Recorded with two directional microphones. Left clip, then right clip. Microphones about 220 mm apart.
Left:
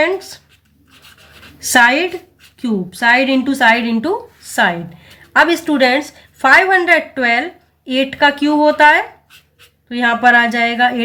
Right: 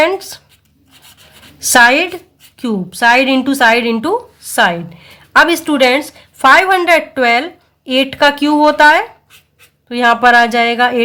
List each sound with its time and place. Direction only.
0.0 s a woman's voice: 35° right (ahead or behind)
1.5 s a woman's voice: 35° right (ahead or behind)